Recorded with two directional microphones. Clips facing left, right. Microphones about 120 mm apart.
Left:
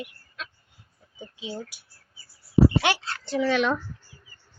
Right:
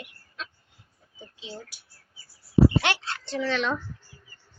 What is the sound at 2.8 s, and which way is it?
Speech, 5° left (ahead or behind).